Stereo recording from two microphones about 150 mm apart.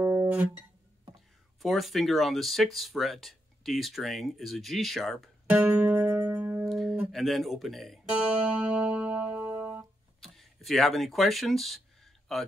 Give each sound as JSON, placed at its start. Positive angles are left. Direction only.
{"t": 0.0, "sound": "music", "side_deg": -15}
{"t": 1.6, "sound": "speech", "side_deg": 0}
{"t": 5.5, "sound": "music", "side_deg": -10}
{"t": 6.7, "sound": "guitar", "side_deg": 0}
{"t": 7.1, "sound": "speech", "side_deg": 0}
{"t": 8.7, "sound": "music", "side_deg": -5}
{"t": 10.2, "sound": "a sound", "side_deg": 0}